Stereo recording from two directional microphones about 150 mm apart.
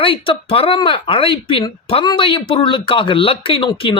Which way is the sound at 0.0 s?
35° left (ahead or behind).